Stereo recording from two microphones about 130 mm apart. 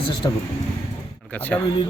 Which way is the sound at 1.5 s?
15° left (ahead or behind).